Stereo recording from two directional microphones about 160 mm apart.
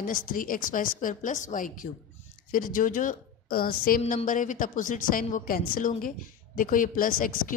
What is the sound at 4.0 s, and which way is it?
A woman's voice, 50° left (ahead or behind).